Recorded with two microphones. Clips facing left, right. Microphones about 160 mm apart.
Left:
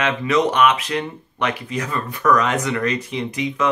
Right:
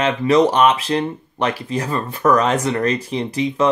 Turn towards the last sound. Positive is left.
turn(degrees=-30)  # may be behind; listen again after turning